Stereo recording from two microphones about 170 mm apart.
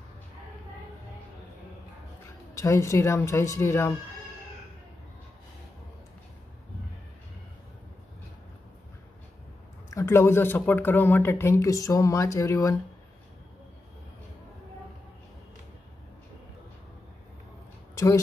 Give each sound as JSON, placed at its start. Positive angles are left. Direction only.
{"t": 2.5, "sound": "speech", "side_deg": 20}
{"t": 9.8, "sound": "speech", "side_deg": 15}
{"t": 17.9, "sound": "speech", "side_deg": 20}